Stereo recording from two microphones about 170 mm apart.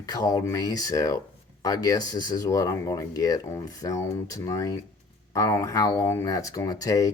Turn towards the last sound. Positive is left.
turn(degrees=20)  # may be behind; listen again after turning